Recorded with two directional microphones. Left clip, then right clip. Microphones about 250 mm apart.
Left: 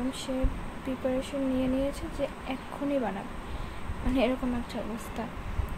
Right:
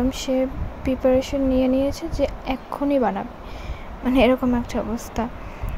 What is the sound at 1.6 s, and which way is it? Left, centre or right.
A woman's voice, right.